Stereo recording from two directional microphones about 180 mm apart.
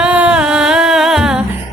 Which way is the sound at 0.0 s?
5° right (ahead or behind).